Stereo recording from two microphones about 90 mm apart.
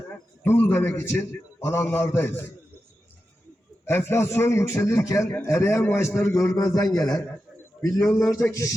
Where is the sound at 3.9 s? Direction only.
25° left (ahead or behind).